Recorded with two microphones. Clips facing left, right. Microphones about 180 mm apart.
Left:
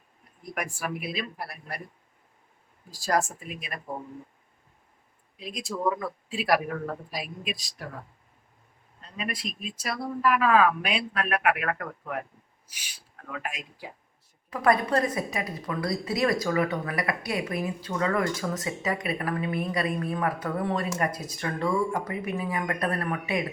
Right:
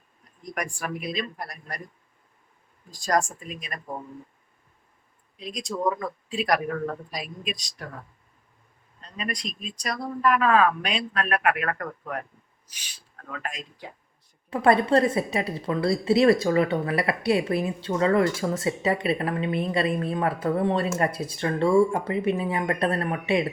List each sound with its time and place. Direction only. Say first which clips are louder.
0.4 s speech: right 1 dB; 5° left (ahead or behind)
2.9 s speech: right 2 dB; 5° left (ahead or behind)
5.4 s speech: right 2 dB; 5° left (ahead or behind)
9.0 s speech: right 1 dB; 5° left (ahead or behind)
14.5 s a woman's voice: right 4 dB; 30° right (ahead or behind)